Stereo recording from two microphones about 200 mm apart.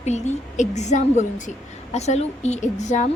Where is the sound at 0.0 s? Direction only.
35° left (ahead or behind).